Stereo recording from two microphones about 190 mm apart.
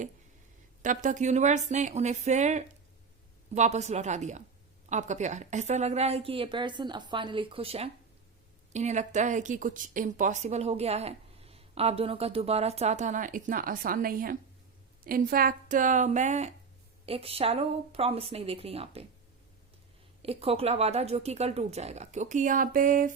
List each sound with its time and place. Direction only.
0.8 s a woman's voice: 40° right (ahead or behind)
20.2 s speech: 30° right (ahead or behind)